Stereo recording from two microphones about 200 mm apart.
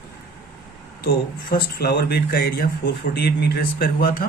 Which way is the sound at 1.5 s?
50° left (ahead or behind).